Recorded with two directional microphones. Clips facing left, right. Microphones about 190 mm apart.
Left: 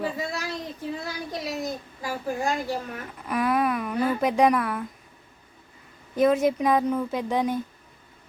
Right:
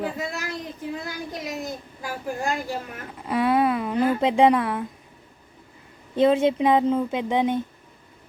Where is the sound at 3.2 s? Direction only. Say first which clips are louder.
Right 3 dB; 25° right (ahead or behind).